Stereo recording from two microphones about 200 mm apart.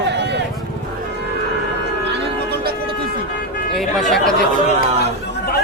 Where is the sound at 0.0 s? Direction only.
60° right (ahead or behind).